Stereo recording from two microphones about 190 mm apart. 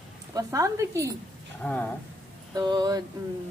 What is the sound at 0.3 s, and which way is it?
Speech, 20° right (ahead or behind).